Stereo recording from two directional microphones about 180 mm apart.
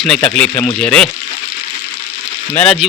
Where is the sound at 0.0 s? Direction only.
5° left (ahead or behind).